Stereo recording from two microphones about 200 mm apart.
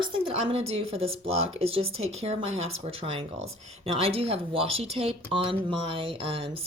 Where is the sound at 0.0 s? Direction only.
30° right (ahead or behind).